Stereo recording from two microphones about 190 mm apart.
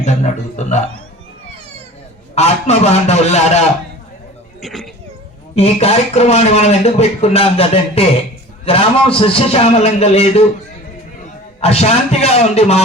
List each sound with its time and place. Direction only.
0.0 s a man's voice: 35° left (ahead or behind)
2.3 s a man's voice: 35° left (ahead or behind)
4.6 s speech: centre (ahead or behind)
5.5 s a man's voice: 35° left (ahead or behind)
11.6 s a man's voice: 35° left (ahead or behind)